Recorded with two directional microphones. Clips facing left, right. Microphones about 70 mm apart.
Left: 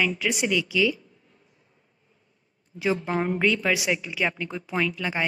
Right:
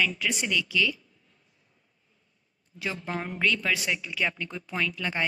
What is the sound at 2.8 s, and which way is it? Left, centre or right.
A woman's voice, left.